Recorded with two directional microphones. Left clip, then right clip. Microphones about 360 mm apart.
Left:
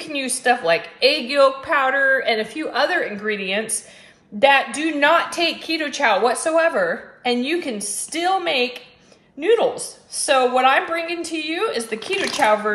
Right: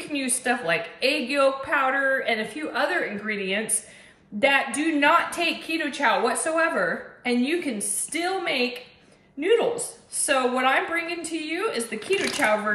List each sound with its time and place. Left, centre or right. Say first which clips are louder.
0.1 s a woman's voice: left 7 dB; centre